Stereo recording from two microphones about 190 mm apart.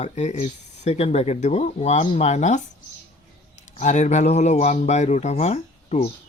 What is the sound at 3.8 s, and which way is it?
Speech, 40° left (ahead or behind).